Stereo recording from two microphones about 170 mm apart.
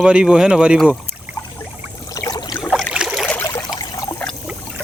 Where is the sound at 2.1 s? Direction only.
20° left (ahead or behind).